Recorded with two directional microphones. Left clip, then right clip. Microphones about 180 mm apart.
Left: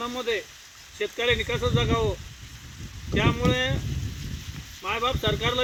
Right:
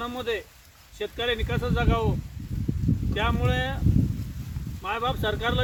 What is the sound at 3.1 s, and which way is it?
Speech, 10° right (ahead or behind).